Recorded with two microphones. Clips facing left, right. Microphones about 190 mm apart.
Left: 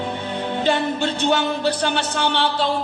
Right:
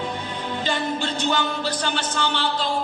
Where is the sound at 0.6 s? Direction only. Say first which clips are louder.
Left 5 dB; 60° left (ahead or behind).